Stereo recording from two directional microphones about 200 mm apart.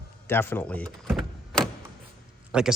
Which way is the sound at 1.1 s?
Centre (ahead or behind).